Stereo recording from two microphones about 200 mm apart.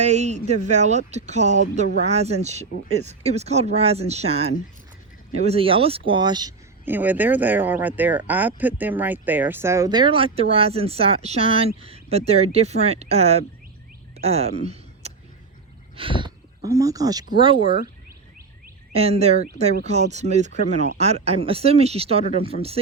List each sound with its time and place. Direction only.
0.0 s speech: 35° right (ahead or behind)
6.8 s speech: 10° right (ahead or behind); by 13.4 s 30° right (ahead or behind)
14.2 s a sound: 30° right (ahead or behind)
16.0 s speech: 25° right (ahead or behind)
18.9 s speech: 30° right (ahead or behind)